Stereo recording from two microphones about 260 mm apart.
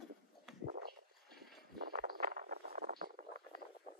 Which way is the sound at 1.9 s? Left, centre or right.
Right.